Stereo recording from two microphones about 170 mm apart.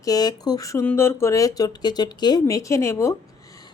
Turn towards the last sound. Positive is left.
turn(degrees=15)  # may be behind; listen again after turning